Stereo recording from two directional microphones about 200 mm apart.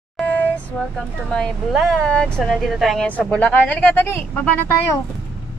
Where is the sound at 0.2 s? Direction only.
10° left (ahead or behind).